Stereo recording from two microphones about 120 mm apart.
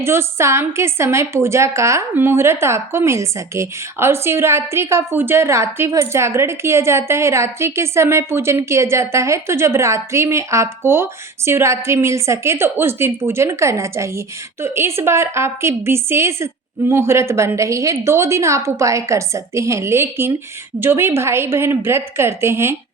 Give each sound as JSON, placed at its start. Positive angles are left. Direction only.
{"t": 0.0, "sound": "a woman's voice", "side_deg": -20}